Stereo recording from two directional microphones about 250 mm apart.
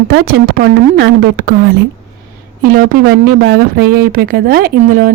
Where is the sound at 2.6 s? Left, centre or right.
Right.